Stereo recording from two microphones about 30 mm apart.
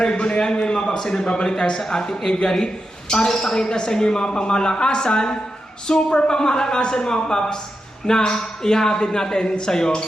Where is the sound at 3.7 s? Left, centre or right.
Left.